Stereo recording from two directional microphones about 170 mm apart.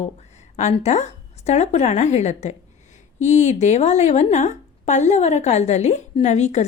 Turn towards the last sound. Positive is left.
turn(degrees=40)  # may be behind; listen again after turning